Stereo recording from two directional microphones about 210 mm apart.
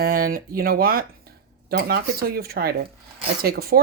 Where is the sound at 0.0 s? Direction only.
45° right (ahead or behind).